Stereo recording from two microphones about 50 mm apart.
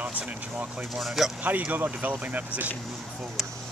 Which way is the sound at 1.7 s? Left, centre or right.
Right.